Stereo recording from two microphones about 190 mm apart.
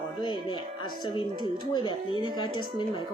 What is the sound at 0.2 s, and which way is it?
A woman's voice, 25° left (ahead or behind).